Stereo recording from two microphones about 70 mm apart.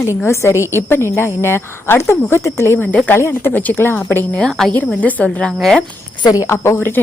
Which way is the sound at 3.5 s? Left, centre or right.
Left.